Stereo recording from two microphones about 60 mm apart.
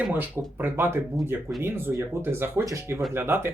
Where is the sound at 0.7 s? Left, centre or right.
Right.